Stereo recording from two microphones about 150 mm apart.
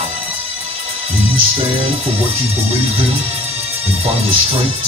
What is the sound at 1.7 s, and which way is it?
Speech, 40° right (ahead or behind).